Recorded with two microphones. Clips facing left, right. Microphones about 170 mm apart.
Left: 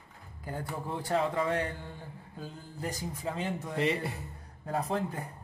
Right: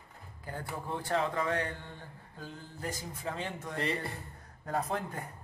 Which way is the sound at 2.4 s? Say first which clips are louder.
Left 2 dB; 15° left (ahead or behind).